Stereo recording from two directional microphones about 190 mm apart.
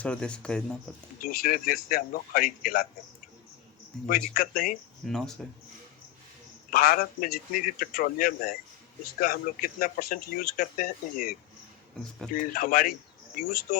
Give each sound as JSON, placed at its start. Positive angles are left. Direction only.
{"t": 0.0, "sound": "speech", "side_deg": 5}
{"t": 1.2, "sound": "speech", "side_deg": 50}
{"t": 4.1, "sound": "speech", "side_deg": 50}
{"t": 5.0, "sound": "speech", "side_deg": 0}
{"t": 6.7, "sound": "speech", "side_deg": 50}